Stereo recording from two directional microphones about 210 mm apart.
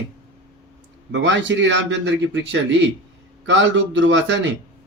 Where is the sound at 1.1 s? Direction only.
60° right (ahead or behind).